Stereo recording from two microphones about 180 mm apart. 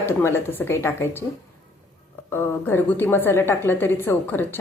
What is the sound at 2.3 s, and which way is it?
A woman's voice, 10° left (ahead or behind).